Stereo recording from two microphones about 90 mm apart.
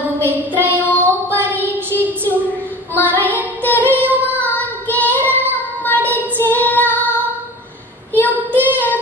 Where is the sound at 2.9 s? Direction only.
20° left (ahead or behind).